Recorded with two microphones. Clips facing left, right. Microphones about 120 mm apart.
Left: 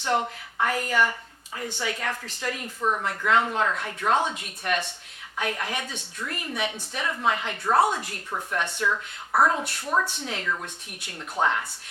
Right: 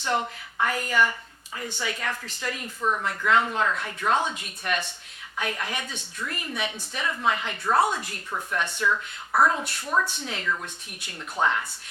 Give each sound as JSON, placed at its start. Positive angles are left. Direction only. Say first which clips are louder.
{"t": 0.0, "sound": "speech", "louder": "left 1 dB", "side_deg": 50}
{"t": 2.8, "sound": "speech", "louder": "even", "side_deg": 30}
{"t": 3.1, "sound": "speech", "louder": "right 1 dB", "side_deg": 45}
{"t": 6.1, "sound": "speech", "louder": "left 1 dB", "side_deg": 45}
{"t": 8.3, "sound": "speech", "louder": "even", "side_deg": 30}
{"t": 10.1, "sound": "speech", "louder": "even", "side_deg": 60}
{"t": 11.2, "sound": "speech", "louder": "even", "side_deg": 40}